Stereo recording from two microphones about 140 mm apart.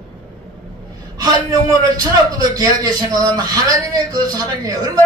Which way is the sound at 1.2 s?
25° right (ahead or behind).